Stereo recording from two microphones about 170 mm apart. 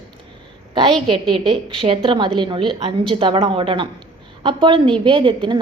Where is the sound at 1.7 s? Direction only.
35° right (ahead or behind).